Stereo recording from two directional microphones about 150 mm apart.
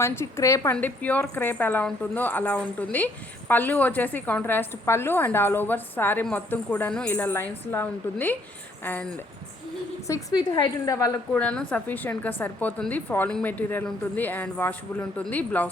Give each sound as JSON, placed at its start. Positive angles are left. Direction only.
{"t": 0.0, "sound": "a woman's voice", "side_deg": 20}
{"t": 10.1, "sound": "a woman's voice", "side_deg": 20}
{"t": 11.3, "sound": "a woman's voice", "side_deg": 10}